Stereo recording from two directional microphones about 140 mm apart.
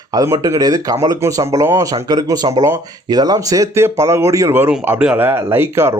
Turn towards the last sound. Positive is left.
turn(degrees=-15)  # may be behind; listen again after turning